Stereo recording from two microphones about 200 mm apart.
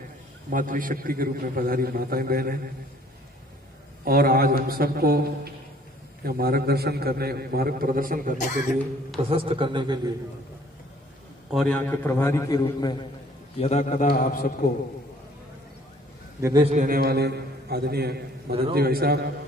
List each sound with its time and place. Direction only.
0.5 s a man's voice: 45° right (ahead or behind)
4.0 s a man's voice: 50° right (ahead or behind)
8.5 s speech: centre (ahead or behind)
9.3 s speech: 25° right (ahead or behind)
11.5 s a man's voice: 5° left (ahead or behind)
13.6 s a man's voice: 35° left (ahead or behind)
14.1 s a man's voice: 45° left (ahead or behind)
16.3 s a man's voice: 15° right (ahead or behind)
16.7 s a man's voice: 45° right (ahead or behind)
18.5 s speech: 30° right (ahead or behind)
18.8 s a man's voice: 50° right (ahead or behind)